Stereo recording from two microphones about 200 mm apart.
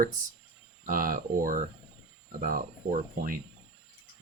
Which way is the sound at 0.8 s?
45° right (ahead or behind).